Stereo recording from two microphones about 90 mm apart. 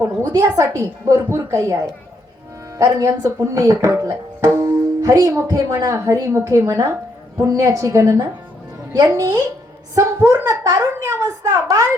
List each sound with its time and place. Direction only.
0.3 s speech: 35° right (ahead or behind)